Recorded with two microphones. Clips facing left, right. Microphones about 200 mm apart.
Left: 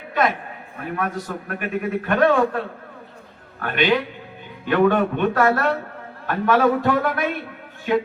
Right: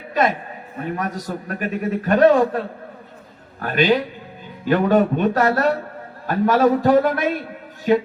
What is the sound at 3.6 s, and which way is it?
A man's voice, 40° right (ahead or behind).